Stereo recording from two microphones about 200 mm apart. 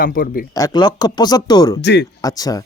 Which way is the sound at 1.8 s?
60° left (ahead or behind).